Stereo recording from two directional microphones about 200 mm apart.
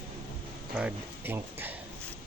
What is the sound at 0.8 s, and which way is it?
Speech, 10° right (ahead or behind).